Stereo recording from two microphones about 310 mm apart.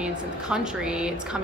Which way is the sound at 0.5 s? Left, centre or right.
Centre.